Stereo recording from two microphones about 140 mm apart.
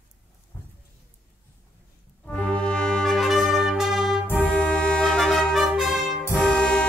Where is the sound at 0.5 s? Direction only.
20° left (ahead or behind).